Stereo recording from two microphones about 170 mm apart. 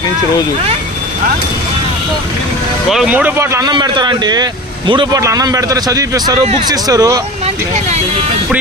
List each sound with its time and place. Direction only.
2.9 s a man's voice: 5° right (ahead or behind); by 7.2 s 20° right (ahead or behind)
7.4 s speech: 40° right (ahead or behind)